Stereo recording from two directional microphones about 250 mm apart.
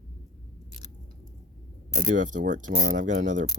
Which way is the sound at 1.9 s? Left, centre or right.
Right.